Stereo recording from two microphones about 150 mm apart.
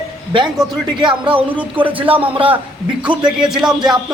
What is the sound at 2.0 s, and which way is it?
Speech, 35° right (ahead or behind).